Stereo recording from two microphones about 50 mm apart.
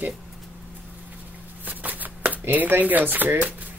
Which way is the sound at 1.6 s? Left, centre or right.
Right.